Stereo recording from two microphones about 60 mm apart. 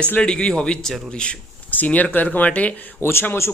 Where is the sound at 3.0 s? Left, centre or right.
Left.